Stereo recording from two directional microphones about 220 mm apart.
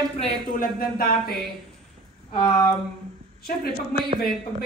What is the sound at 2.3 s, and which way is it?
Speech, 20° left (ahead or behind).